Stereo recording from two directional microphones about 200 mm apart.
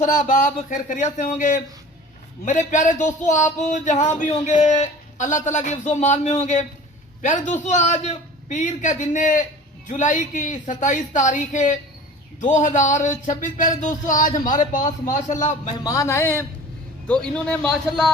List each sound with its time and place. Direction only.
0.0 s a man's voice: 40° left (ahead or behind)
15.8 s a man's voice: 15° left (ahead or behind)